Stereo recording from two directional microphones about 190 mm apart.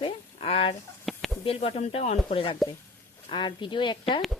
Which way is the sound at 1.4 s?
30° left (ahead or behind).